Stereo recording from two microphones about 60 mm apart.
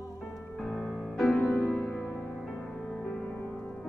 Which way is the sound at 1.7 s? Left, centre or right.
Centre.